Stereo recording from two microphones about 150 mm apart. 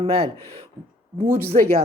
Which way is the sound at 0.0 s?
40° right (ahead or behind).